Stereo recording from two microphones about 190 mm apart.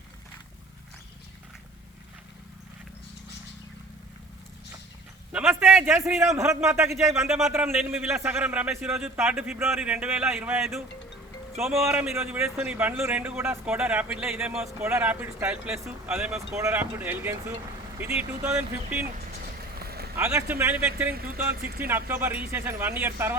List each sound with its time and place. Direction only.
5.3 s speech: 10° right (ahead or behind)
7.3 s speech: centre (ahead or behind)
11.8 s speech: 15° right (ahead or behind)
19.8 s a sound: 55° right (ahead or behind)
20.1 s speech: 15° right (ahead or behind)
21.5 s speech: 55° right (ahead or behind)
21.8 s speech: 10° right (ahead or behind)